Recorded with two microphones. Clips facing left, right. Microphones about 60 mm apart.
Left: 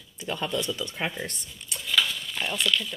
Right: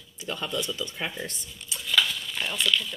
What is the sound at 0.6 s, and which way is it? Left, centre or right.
Speech, left.